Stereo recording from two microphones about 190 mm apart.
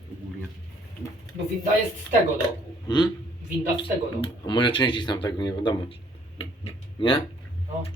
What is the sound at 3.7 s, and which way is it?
Speech, 30° left (ahead or behind).